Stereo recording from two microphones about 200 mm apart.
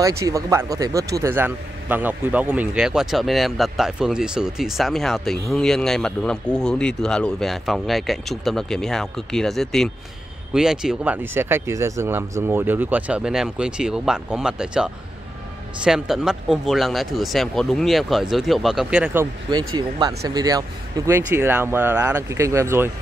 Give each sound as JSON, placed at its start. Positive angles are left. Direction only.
{"t": 0.2, "sound": "a man's voice", "side_deg": -15}
{"t": 19.5, "sound": "speech", "side_deg": -20}